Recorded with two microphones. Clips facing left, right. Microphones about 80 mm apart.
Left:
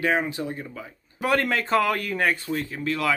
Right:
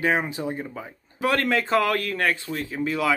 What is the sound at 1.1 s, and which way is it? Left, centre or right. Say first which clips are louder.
Speech: right 1 dB; centre.